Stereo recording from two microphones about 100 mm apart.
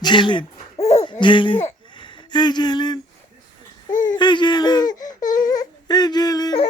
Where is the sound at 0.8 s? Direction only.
90° left.